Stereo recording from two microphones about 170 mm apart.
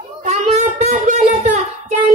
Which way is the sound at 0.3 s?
40° right (ahead or behind).